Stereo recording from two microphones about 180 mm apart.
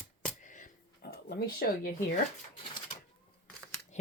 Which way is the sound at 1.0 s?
60° left (ahead or behind).